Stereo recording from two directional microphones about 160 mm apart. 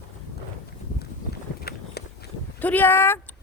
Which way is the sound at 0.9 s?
85° left.